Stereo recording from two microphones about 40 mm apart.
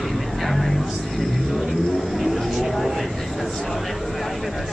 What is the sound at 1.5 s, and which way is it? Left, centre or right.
Music, centre.